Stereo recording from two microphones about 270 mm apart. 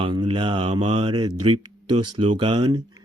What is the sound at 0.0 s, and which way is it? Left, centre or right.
Speech, centre.